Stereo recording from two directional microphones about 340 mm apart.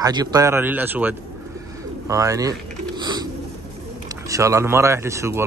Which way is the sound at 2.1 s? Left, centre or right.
Centre.